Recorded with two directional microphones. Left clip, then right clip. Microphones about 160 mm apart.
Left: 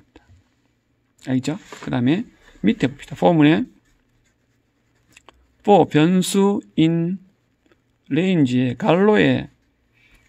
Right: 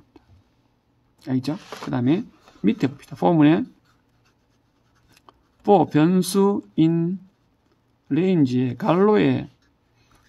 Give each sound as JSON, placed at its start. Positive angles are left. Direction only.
{"t": 1.2, "sound": "speech", "side_deg": 40}
{"t": 5.1, "sound": "speech", "side_deg": 35}